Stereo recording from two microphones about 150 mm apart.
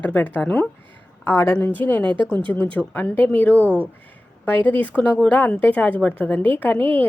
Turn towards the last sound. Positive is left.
turn(degrees=10)  # may be behind; listen again after turning